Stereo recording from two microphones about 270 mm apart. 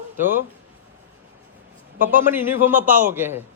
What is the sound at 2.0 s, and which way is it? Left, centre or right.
A man's voice, centre.